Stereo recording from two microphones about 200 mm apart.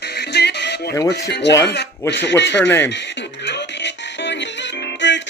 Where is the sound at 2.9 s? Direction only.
60° left (ahead or behind).